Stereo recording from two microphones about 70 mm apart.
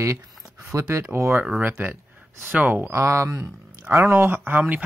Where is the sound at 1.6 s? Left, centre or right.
Right.